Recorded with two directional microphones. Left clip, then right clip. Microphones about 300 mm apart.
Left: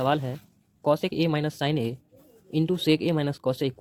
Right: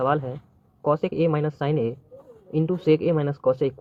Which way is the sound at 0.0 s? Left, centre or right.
Left.